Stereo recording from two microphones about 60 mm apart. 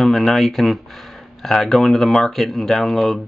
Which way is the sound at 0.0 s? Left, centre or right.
Centre.